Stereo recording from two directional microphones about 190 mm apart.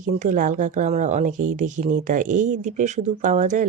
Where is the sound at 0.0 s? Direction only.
40° right (ahead or behind).